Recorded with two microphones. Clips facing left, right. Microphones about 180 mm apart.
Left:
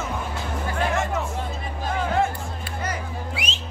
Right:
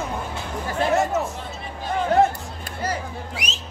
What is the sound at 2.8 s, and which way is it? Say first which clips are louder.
Music: right 4 dB; 40° right (ahead or behind).